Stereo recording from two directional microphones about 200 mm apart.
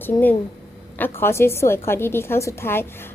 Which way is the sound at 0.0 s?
10° left (ahead or behind).